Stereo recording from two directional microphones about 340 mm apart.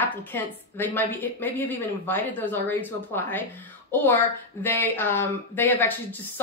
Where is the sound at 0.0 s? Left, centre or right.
Centre.